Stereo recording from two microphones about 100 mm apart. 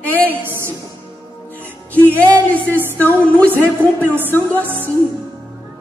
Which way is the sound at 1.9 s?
15° left (ahead or behind).